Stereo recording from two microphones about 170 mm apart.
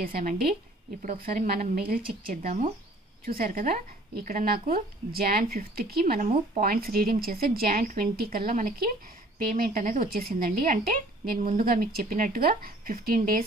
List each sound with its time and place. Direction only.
0.0 s a woman's voice: 50° right (ahead or behind)